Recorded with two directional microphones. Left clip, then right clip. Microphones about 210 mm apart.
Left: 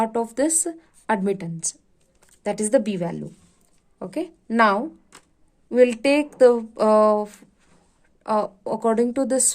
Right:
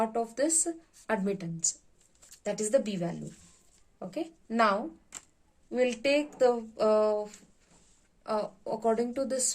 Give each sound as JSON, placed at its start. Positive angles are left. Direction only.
{"t": 0.0, "sound": "speech", "side_deg": 50}